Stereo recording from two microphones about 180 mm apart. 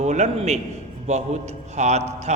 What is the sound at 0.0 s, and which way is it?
A man's voice, 40° right (ahead or behind).